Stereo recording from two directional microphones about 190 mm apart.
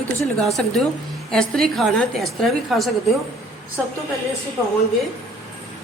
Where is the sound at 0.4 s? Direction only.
Centre (ahead or behind).